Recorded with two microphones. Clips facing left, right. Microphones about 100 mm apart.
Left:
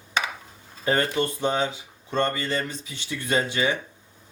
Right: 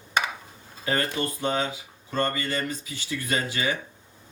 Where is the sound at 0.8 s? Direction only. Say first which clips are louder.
Left 4 dB; 25° left (ahead or behind).